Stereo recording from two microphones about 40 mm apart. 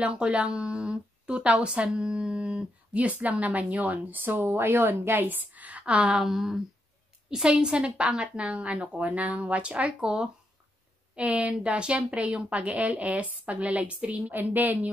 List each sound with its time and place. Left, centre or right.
0.0 s speech: right
6.2 s speech: centre
7.4 s a woman's voice: right
14.3 s a woman's voice: right